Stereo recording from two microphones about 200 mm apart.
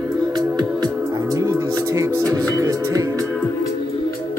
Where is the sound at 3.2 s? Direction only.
10° left (ahead or behind).